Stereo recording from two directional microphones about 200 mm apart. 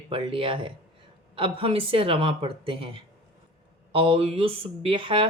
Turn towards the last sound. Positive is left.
turn(degrees=-25)  # may be behind; listen again after turning